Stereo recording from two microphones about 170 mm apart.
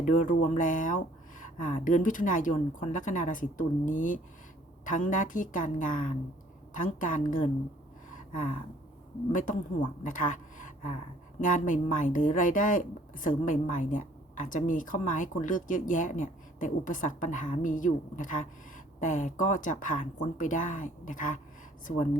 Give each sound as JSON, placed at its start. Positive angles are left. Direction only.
{"t": 0.0, "sound": "speech", "side_deg": 50}
{"t": 9.3, "sound": "speech", "side_deg": 50}
{"t": 10.0, "sound": "a sound", "side_deg": 50}
{"t": 11.3, "sound": "speech", "side_deg": 50}